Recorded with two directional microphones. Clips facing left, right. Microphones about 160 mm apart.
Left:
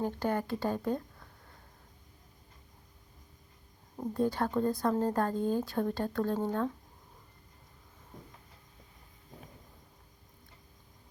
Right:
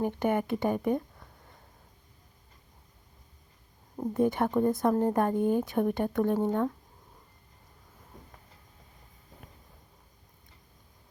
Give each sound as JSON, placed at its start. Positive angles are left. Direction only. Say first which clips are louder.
{"t": 0.0, "sound": "speech", "louder": "right 4 dB", "side_deg": -20}
{"t": 3.9, "sound": "speech", "louder": "right 4 dB", "side_deg": -15}